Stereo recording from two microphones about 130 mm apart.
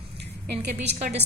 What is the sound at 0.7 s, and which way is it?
Speech, 55° right (ahead or behind).